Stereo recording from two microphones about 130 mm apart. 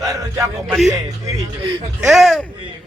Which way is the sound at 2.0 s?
Centre (ahead or behind).